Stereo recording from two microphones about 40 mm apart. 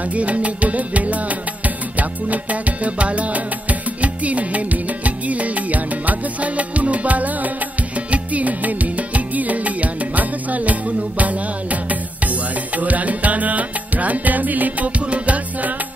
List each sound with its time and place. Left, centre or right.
0.1 s music: right
15.0 s music: right